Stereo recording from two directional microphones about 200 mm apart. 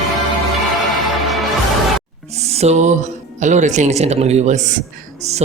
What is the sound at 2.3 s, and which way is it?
Music, 30° right (ahead or behind).